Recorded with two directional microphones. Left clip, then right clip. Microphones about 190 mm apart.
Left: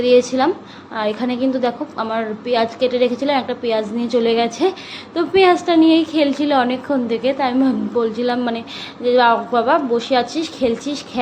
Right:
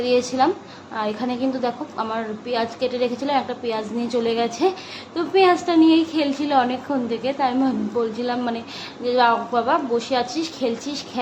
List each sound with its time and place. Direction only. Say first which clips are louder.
0.0 s a woman's voice: left 5 dB; 15° left (ahead or behind)